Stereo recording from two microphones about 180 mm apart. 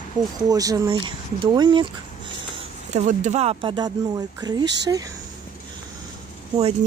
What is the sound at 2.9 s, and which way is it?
Speech, 40° right (ahead or behind).